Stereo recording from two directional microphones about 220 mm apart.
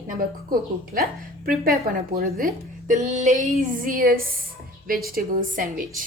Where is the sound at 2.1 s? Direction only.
40° right (ahead or behind).